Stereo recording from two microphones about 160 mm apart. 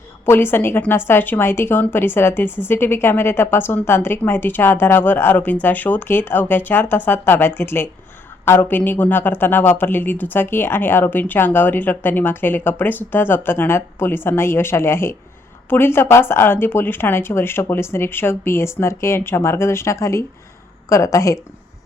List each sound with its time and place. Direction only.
0.3 s speech: 15° left (ahead or behind)